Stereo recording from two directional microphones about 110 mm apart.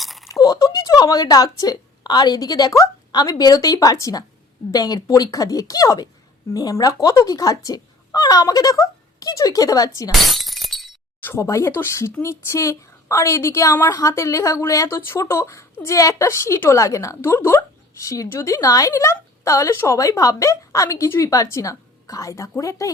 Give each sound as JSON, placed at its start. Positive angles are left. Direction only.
{"t": 0.0, "sound": "a sound", "side_deg": 0}
{"t": 0.3, "sound": "a woman's voice", "side_deg": 35}
{"t": 10.1, "sound": "breaking", "side_deg": 0}
{"t": 11.2, "sound": "a woman's voice", "side_deg": 25}